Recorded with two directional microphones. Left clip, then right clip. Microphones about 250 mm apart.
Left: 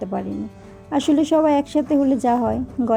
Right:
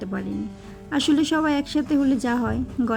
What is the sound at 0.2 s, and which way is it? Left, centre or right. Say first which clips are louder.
Speech: left 3 dB; centre.